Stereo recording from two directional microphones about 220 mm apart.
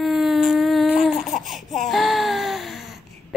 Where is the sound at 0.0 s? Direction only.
Centre (ahead or behind).